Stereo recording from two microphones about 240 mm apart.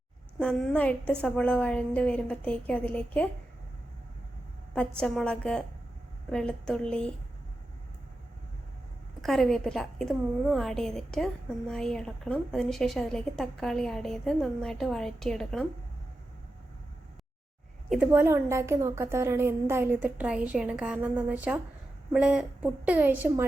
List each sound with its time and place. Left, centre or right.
0.3 s a woman's voice: centre
4.7 s a woman's voice: centre
9.2 s a woman's voice: centre
17.8 s a woman's voice: centre